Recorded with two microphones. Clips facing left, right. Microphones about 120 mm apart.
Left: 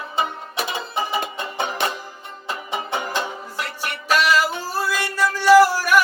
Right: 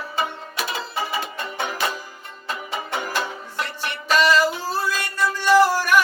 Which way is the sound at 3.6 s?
10° left (ahead or behind).